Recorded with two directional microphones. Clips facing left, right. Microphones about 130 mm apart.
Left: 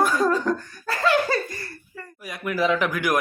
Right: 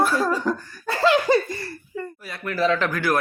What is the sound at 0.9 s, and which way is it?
Speech, 25° right (ahead or behind).